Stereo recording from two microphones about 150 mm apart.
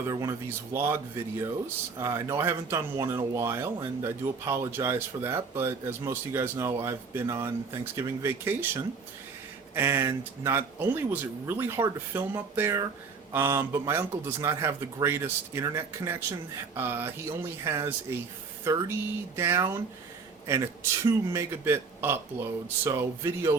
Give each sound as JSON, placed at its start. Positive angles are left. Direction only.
{"t": 0.1, "sound": "speech", "side_deg": -20}
{"t": 21.0, "sound": "speech", "side_deg": -15}